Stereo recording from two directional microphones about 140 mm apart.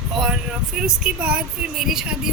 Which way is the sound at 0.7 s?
5° right (ahead or behind).